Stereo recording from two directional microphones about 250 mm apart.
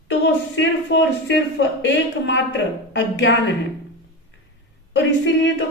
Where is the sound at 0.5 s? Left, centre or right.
Left.